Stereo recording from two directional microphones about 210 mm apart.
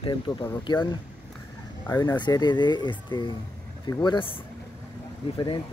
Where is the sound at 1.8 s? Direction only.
15° left (ahead or behind).